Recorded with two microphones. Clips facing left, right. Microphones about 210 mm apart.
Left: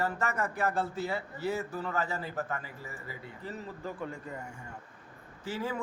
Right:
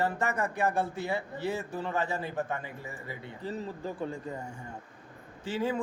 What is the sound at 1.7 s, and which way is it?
A man's voice, 25° right (ahead or behind).